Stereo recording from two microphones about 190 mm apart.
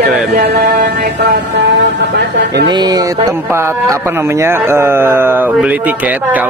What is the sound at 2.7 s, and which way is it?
Speech, 20° right (ahead or behind).